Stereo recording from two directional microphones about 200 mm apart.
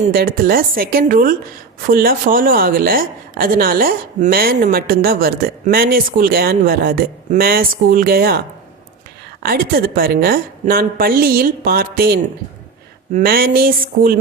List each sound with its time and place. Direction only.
0.1 s a woman's voice: 50° right (ahead or behind)
9.4 s a woman's voice: 50° right (ahead or behind)